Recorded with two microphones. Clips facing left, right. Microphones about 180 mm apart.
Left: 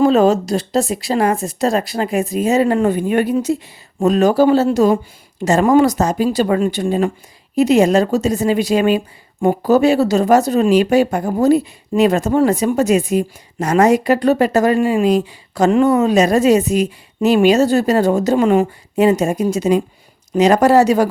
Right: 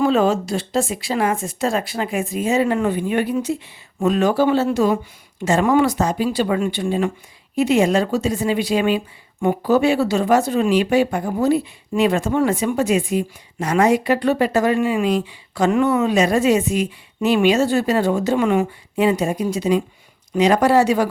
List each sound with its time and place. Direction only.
0.0 s a woman's voice: 40° left (ahead or behind)